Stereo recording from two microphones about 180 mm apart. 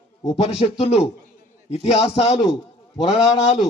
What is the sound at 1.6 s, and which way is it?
A man's voice, 35° left (ahead or behind).